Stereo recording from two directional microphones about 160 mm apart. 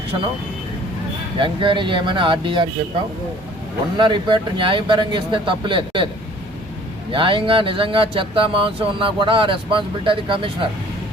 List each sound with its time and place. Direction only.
1.4 s speech: 30° right (ahead or behind)
3.9 s speech: 30° right (ahead or behind)
7.1 s speech: 30° right (ahead or behind)